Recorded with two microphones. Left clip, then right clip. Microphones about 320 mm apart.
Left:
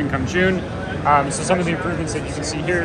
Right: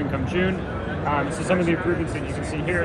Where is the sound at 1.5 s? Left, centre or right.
Left.